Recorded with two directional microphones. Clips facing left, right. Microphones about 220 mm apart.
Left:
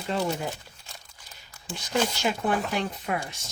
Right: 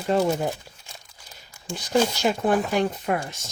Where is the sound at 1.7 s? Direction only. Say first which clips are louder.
Right 5 dB; 40° right (ahead or behind).